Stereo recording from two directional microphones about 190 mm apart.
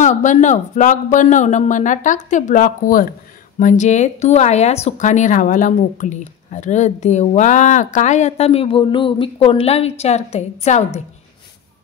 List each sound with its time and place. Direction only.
0.0 s speech: 40° left (ahead or behind)